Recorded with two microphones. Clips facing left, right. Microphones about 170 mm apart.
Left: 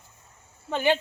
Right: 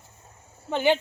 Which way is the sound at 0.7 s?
15° right (ahead or behind).